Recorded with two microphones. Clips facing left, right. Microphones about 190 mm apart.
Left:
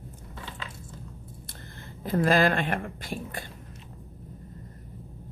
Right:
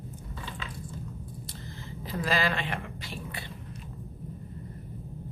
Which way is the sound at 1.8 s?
50° left (ahead or behind).